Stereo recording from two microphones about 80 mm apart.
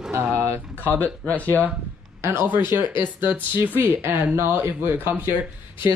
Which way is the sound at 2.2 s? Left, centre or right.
Right.